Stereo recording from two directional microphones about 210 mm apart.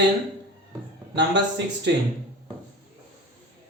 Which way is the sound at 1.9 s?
55° right (ahead or behind).